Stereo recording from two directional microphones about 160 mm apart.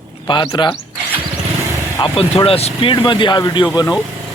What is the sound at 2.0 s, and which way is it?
Speech, 35° left (ahead or behind).